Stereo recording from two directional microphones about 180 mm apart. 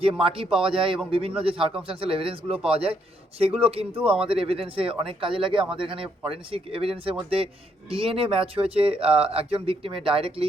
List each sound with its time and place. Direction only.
0.2 s a man's voice: 30° right (ahead or behind)
4.0 s speech: 5° right (ahead or behind)
4.3 s speech: 30° right (ahead or behind)